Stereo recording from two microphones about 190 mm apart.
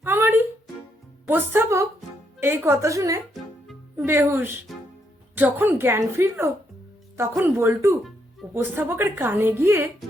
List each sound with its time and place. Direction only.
0.0 s music: 10° right (ahead or behind)
1.3 s a woman's voice: 10° right (ahead or behind)